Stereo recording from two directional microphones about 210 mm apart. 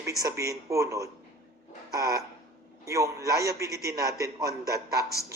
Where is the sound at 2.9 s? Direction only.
15° right (ahead or behind).